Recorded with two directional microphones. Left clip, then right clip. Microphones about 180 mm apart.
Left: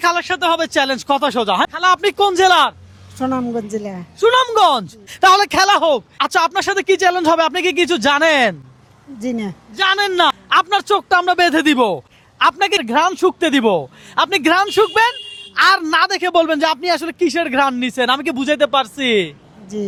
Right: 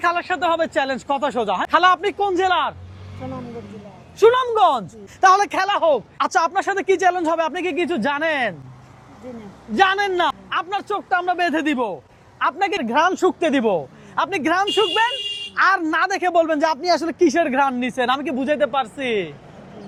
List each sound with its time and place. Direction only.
0.0 s speech: 30° left (ahead or behind)
4.3 s speech: 40° left (ahead or behind); by 5.5 s 25° left (ahead or behind)
5.5 s speech: 45° left (ahead or behind)
6.1 s speech: 20° left (ahead or behind); by 8.5 s 45° left (ahead or behind)
9.8 s speech: 35° left (ahead or behind)
12.4 s speech: 35° left (ahead or behind)
14.8 s speech: 45° left (ahead or behind)
15.5 s speech: 25° left (ahead or behind)
17.5 s speech: 35° left (ahead or behind)